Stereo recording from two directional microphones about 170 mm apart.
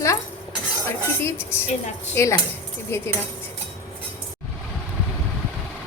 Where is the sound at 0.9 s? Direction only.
15° left (ahead or behind).